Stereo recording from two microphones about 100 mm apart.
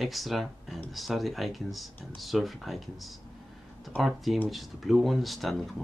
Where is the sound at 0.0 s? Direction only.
Centre (ahead or behind).